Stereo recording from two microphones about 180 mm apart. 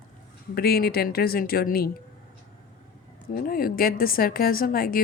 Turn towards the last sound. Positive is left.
turn(degrees=55)  # may be behind; listen again after turning